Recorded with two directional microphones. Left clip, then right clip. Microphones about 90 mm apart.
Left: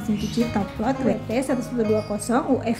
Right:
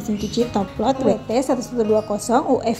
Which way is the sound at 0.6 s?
25° right (ahead or behind).